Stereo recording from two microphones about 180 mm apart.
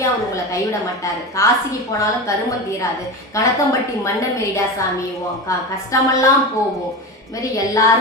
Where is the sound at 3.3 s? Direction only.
15° left (ahead or behind).